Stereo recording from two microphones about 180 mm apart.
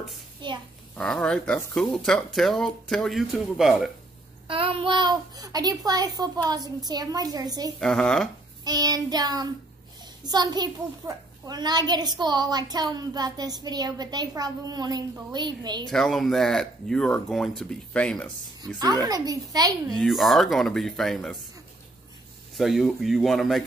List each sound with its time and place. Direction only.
0.4 s a child's voice: 25° right (ahead or behind)
0.9 s speech: 5° left (ahead or behind)
4.5 s a child's voice: 30° right (ahead or behind)
7.8 s speech: 5° left (ahead or behind)
8.6 s a child's voice: 20° right (ahead or behind)
15.9 s speech: centre (ahead or behind)
19.0 s a child's voice: 20° right (ahead or behind)
20.0 s speech: centre (ahead or behind)
22.6 s speech: centre (ahead or behind)